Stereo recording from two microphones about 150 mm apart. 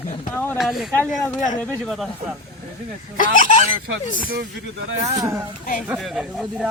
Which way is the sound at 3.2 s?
60° left (ahead or behind).